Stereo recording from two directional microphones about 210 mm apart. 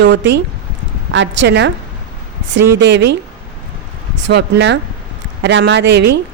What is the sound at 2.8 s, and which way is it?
Speech, 55° right (ahead or behind).